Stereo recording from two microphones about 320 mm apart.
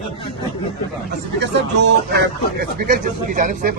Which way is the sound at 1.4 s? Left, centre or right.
Right.